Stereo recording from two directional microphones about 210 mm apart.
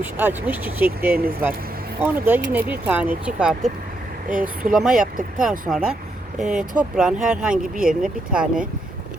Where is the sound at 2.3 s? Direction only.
10° right (ahead or behind).